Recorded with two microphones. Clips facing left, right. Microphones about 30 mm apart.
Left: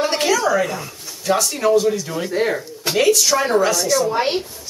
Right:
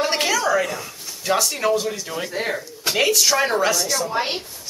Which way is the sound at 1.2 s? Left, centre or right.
Centre.